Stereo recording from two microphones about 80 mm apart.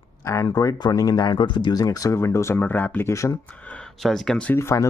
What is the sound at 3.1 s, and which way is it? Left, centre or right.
Speech, left.